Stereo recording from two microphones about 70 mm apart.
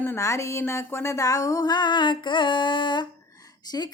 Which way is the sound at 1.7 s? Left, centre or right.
Left.